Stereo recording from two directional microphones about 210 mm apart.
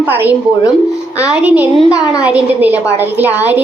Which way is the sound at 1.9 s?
15° left (ahead or behind).